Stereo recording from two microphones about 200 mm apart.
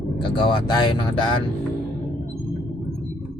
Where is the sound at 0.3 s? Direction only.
25° left (ahead or behind).